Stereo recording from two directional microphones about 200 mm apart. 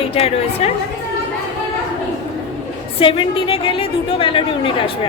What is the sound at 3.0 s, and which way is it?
A woman's voice, 25° left (ahead or behind).